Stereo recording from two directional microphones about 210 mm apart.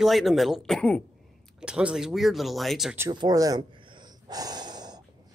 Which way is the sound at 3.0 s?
20° right (ahead or behind).